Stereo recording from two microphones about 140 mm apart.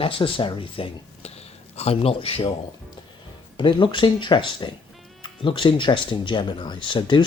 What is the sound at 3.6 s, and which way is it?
Speech, 35° left (ahead or behind).